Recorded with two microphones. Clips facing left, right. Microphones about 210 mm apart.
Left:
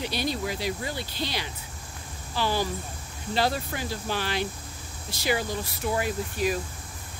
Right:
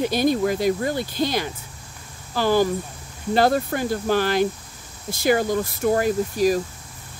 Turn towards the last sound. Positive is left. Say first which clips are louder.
# right 8 dB
turn(degrees=-40)  # may be behind; listen again after turning